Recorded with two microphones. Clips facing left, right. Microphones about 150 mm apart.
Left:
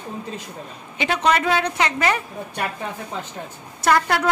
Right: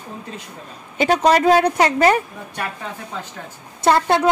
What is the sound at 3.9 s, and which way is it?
Speech, 25° right (ahead or behind).